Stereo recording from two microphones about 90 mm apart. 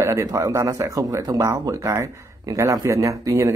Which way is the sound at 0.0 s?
35° right (ahead or behind).